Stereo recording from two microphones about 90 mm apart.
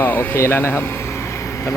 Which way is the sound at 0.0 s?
25° left (ahead or behind).